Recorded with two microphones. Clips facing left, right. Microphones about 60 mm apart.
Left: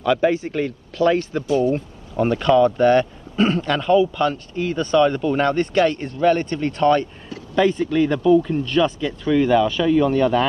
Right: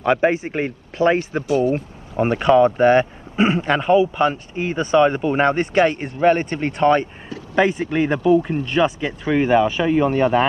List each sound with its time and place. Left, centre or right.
0.0 s speech: right
8.6 s speech: right